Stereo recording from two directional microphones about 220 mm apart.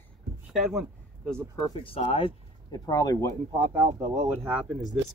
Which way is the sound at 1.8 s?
25° left (ahead or behind).